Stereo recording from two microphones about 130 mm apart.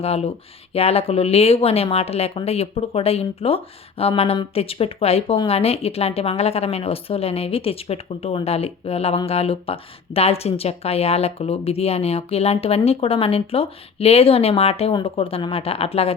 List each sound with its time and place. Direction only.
0.0 s a woman's voice: 50° left (ahead or behind)